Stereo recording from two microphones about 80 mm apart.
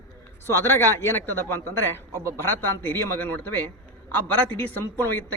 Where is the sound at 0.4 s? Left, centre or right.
Left.